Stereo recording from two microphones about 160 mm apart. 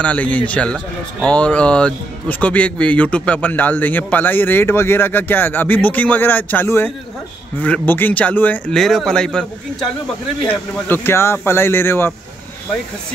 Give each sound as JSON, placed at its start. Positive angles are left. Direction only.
{"t": 0.0, "sound": "speech", "side_deg": 10}